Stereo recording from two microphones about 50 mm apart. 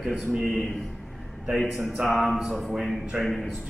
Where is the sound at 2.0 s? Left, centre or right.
Centre.